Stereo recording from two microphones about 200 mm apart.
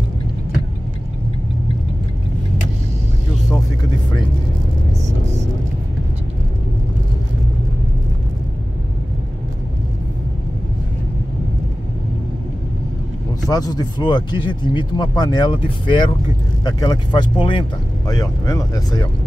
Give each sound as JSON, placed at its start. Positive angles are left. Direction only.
{"t": 13.5, "sound": "speech", "side_deg": 20}